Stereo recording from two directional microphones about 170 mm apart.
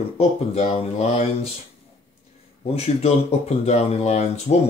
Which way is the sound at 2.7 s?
40° left (ahead or behind).